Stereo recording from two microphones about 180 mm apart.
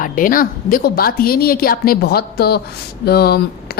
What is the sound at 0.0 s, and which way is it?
A woman's voice, 50° left (ahead or behind).